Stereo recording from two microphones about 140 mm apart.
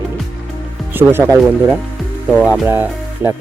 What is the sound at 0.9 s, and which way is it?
Speech, 15° right (ahead or behind).